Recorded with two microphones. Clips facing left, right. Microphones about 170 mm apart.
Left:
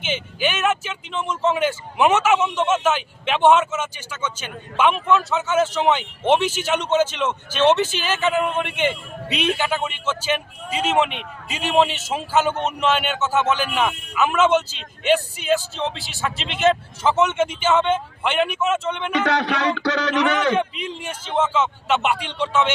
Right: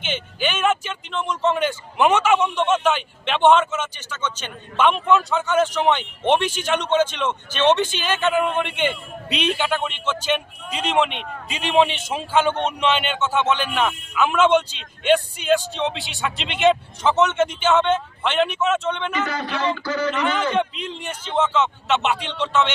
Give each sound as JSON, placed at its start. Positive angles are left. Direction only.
{"t": 0.0, "sound": "speech", "side_deg": 5}
{"t": 19.1, "sound": "speech", "side_deg": 75}
{"t": 20.6, "sound": "speech", "side_deg": 10}